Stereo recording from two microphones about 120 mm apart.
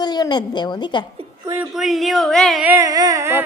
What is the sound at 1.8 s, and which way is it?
Speech, centre (ahead or behind).